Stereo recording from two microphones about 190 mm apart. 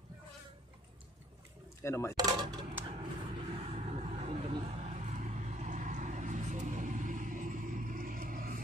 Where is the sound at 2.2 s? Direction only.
20° right (ahead or behind).